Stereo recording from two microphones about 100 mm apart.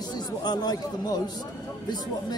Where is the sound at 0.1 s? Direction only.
45° left (ahead or behind).